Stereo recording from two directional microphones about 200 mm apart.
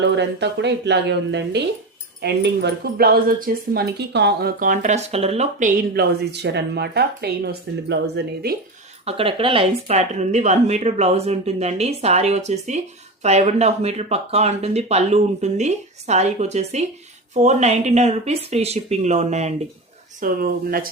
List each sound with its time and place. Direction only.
0.0 s speech: 60° right (ahead or behind)
9.0 s speech: 30° right (ahead or behind)
20.1 s speech: 45° right (ahead or behind)